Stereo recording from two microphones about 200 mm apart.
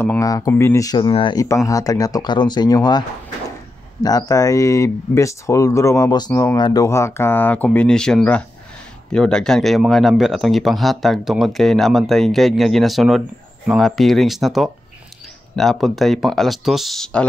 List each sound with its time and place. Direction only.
0.0 s speech: 15° left (ahead or behind)
4.0 s a man's voice: 20° left (ahead or behind); by 17.2 s centre (ahead or behind)